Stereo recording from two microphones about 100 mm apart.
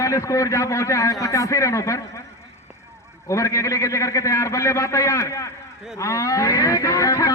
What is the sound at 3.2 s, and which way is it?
A man's voice, 30° left (ahead or behind).